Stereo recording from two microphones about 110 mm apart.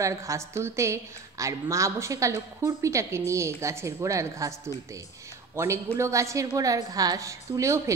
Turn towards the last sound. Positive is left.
turn(degrees=-25)  # may be behind; listen again after turning